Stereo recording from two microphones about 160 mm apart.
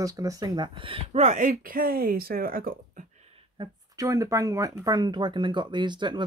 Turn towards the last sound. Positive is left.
turn(degrees=-30)  # may be behind; listen again after turning